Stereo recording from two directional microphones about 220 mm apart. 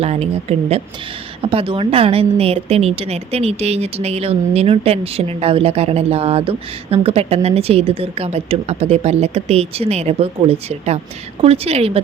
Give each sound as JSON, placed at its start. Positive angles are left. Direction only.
{"t": 0.0, "sound": "a woman's voice", "side_deg": -30}